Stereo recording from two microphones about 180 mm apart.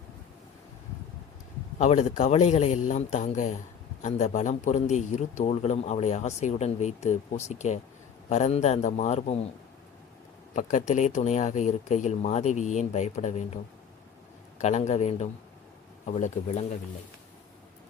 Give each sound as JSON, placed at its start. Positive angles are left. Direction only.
{"t": 1.8, "sound": "a man's voice", "side_deg": 40}
{"t": 10.5, "sound": "a man's voice", "side_deg": 45}
{"t": 14.6, "sound": "a man's voice", "side_deg": 40}